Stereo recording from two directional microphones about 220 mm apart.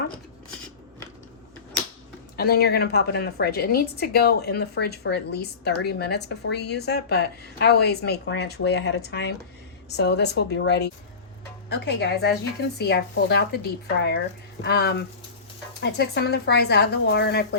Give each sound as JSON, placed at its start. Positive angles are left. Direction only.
{"t": 2.3, "sound": "a woman's voice", "side_deg": 45}